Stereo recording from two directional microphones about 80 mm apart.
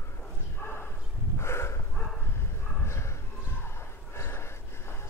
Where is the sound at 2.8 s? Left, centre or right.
Left.